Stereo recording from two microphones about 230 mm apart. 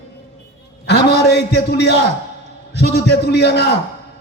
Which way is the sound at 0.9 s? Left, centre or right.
Left.